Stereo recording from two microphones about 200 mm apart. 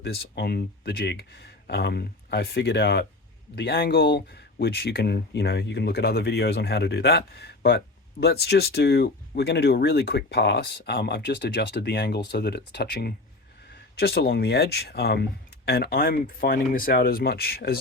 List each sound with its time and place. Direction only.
0.0 s speech: 50° left (ahead or behind)